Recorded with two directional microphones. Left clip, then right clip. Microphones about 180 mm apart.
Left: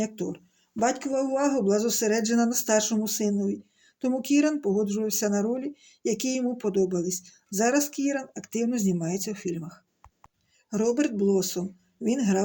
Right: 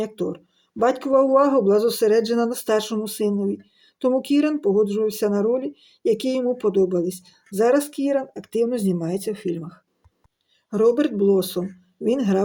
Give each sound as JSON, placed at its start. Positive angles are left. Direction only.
{"t": 0.0, "sound": "speech", "side_deg": 15}
{"t": 10.8, "sound": "speech", "side_deg": 10}